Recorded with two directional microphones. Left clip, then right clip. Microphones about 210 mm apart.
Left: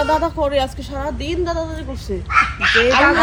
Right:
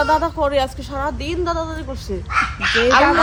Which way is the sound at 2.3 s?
50° right (ahead or behind).